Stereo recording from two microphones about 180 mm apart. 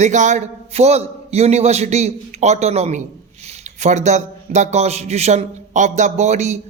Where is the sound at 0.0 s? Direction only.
40° right (ahead or behind).